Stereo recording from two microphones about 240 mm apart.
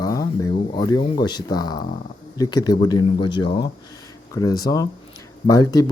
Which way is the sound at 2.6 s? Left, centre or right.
Centre.